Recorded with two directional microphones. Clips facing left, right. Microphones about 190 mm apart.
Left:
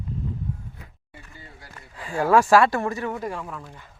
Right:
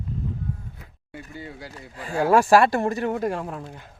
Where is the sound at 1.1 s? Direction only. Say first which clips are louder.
Right 11 dB; 90° right.